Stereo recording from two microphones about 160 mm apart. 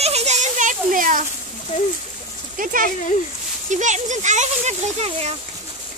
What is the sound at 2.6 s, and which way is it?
Speech, 60° right (ahead or behind).